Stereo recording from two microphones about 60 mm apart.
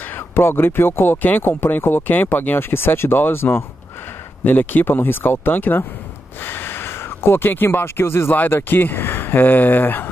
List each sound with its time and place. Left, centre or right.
0.4 s speech: left